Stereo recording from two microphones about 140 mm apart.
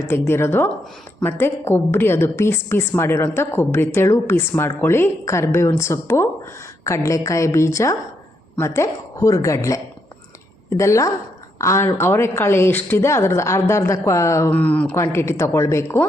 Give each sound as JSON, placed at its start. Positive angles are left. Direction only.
{"t": 0.1, "sound": "a woman's voice", "side_deg": 15}
{"t": 14.5, "sound": "a woman's voice", "side_deg": 10}